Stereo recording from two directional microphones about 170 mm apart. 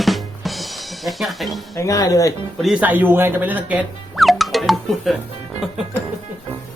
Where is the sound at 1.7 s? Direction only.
20° left (ahead or behind).